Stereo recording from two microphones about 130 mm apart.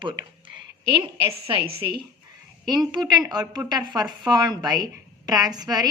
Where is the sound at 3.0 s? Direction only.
30° right (ahead or behind).